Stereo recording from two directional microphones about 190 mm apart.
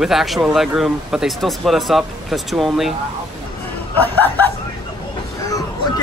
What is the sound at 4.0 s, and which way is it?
Speech, 10° left (ahead or behind).